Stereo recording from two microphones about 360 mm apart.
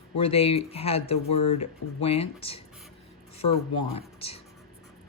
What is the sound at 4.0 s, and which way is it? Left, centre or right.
Speech, centre.